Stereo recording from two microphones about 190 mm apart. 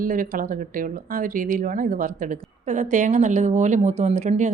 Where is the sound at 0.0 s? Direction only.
45° right (ahead or behind).